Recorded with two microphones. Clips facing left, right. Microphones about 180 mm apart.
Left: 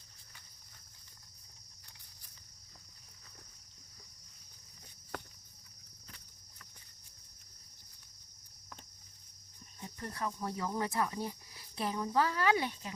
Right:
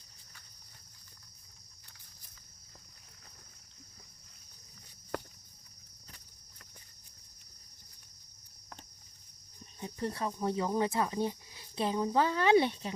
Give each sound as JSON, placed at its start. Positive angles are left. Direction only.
{"t": 9.8, "sound": "speech", "side_deg": -25}